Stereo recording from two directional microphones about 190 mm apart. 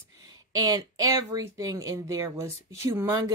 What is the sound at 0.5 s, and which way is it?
Speech, 20° right (ahead or behind).